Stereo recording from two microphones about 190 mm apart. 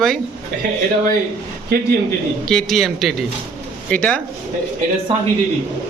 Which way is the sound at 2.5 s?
Centre (ahead or behind).